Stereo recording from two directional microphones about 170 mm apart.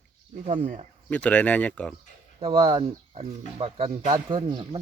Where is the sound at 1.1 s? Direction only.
10° left (ahead or behind).